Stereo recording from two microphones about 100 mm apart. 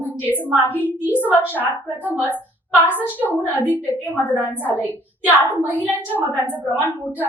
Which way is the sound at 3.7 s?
20° right (ahead or behind).